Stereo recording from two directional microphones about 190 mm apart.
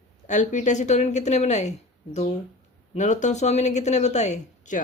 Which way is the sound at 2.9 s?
40° left (ahead or behind).